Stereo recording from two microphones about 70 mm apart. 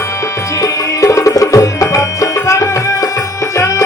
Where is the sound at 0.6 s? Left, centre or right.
Left.